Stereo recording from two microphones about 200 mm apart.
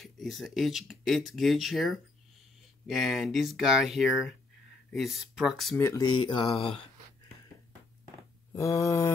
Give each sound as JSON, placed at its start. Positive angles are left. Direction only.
{"t": 0.0, "sound": "speech", "side_deg": 0}
{"t": 5.8, "sound": "speech", "side_deg": 15}
{"t": 8.5, "sound": "mantra", "side_deg": 15}